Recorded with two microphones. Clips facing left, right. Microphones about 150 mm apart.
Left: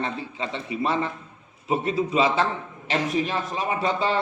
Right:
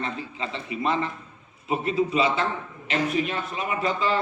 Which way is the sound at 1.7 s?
35° left (ahead or behind).